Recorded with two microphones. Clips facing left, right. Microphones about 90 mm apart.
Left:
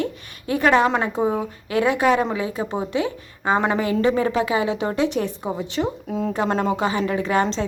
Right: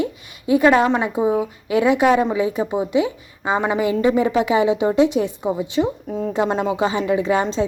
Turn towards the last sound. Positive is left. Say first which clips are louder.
# right 2 dB
turn(degrees=-15)  # may be behind; listen again after turning